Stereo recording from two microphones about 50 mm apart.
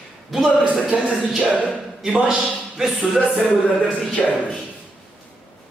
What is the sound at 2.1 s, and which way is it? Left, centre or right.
A man's voice, centre.